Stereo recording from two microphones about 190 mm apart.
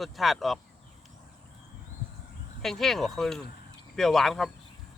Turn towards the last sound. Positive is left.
turn(degrees=0)  # may be behind; listen again after turning